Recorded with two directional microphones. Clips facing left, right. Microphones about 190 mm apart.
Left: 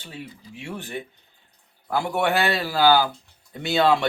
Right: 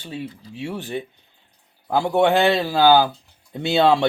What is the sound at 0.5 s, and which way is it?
A man's voice, 20° right (ahead or behind).